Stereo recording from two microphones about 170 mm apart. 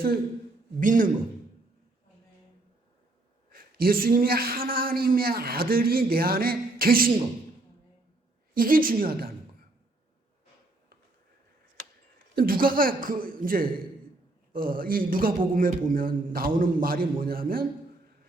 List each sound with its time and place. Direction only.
0.8 s a man's voice: 55° right (ahead or behind)
3.5 s a man's voice: 60° right (ahead or behind)
8.5 s a man's voice: 55° right (ahead or behind)
12.4 s a man's voice: 60° right (ahead or behind)